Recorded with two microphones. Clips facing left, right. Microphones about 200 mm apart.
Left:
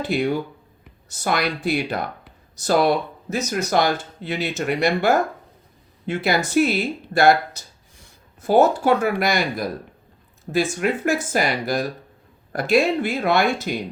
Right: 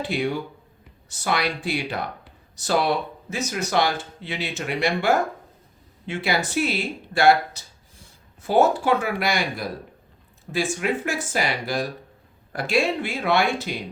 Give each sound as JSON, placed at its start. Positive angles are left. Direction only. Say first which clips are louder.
{"t": 1.1, "sound": "speech", "louder": "left 2 dB", "side_deg": 45}
{"t": 8.4, "sound": "speech", "louder": "left 3 dB", "side_deg": 40}